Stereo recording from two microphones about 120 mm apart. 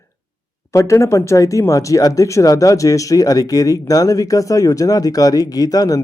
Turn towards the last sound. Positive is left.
turn(degrees=30)  # may be behind; listen again after turning